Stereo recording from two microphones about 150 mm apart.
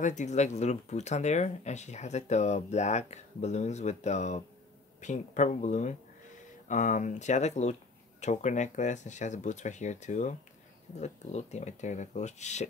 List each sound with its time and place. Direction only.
0.0 s speech: 55° left (ahead or behind)